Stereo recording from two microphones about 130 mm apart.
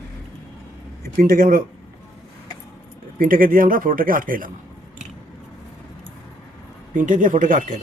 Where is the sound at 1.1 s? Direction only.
90° right.